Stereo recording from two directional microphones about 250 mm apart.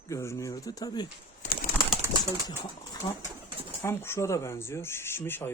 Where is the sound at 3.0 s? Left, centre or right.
Centre.